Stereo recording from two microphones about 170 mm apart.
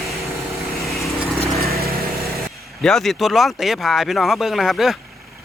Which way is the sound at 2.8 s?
Centre (ahead or behind).